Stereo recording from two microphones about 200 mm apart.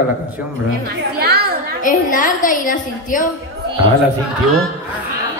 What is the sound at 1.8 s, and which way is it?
A woman's voice, 40° left (ahead or behind).